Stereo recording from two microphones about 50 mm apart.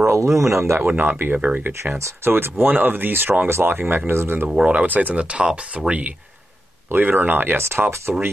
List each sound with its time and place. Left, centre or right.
0.0 s speech: right
0.4 s speech: right
0.8 s speech: right
2.7 s speech: right
4.6 s speech: right
5.1 s speech: right
6.9 s speech: right
8.1 s speech: right